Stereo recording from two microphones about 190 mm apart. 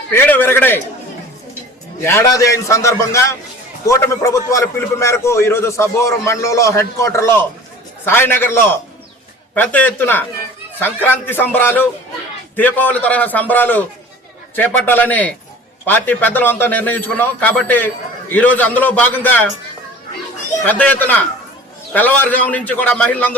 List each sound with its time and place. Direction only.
0.1 s a man's voice: 10° left (ahead or behind)
2.0 s a man's voice: 15° left (ahead or behind)
14.8 s a man's voice: 10° left (ahead or behind)
20.7 s a man's voice: 10° left (ahead or behind)